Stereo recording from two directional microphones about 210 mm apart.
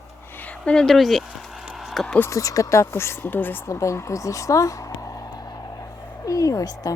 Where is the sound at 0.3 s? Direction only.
5° left (ahead or behind).